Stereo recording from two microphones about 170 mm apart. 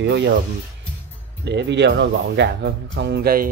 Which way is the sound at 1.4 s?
90° right.